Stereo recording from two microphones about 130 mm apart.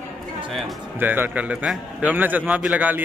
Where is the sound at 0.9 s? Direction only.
15° right (ahead or behind).